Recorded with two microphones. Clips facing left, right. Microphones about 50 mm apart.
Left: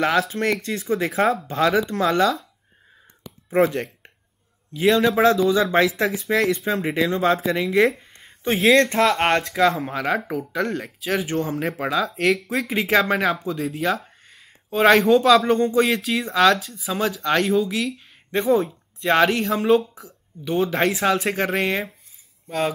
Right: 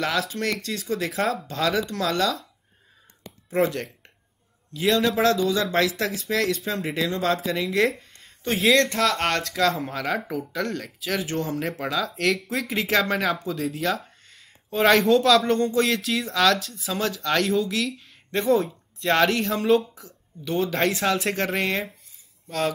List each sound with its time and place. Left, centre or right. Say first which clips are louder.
0.3 s speech: left 4 dB; left
1.2 s speech: left 6 dB; centre
1.5 s speech: left 5 dB; left
4.8 s speech: left 4 dB; centre